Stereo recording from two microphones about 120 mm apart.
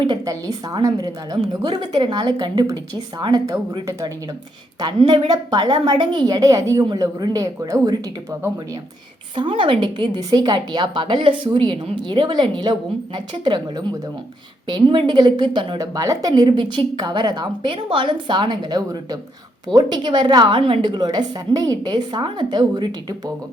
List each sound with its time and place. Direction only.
0.3 s a woman's voice: 30° right (ahead or behind)
4.9 s a woman's voice: 50° right (ahead or behind); by 7.9 s 30° right (ahead or behind)
9.3 s a woman's voice: 40° right (ahead or behind)
10.2 s a woman's voice: 30° right (ahead or behind)
16.0 s a woman's voice: 30° right (ahead or behind)